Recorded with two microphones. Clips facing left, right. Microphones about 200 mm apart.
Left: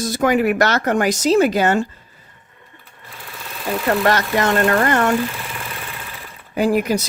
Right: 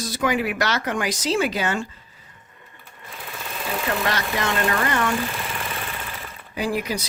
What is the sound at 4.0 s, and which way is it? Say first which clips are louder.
Speech: left 7 dB; 50° left (ahead or behind).